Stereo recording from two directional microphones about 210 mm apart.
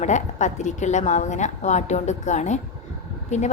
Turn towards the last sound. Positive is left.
turn(degrees=35)  # may be behind; listen again after turning